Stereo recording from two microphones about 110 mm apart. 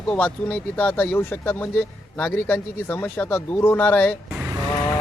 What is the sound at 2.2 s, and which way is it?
Speech, 15° left (ahead or behind).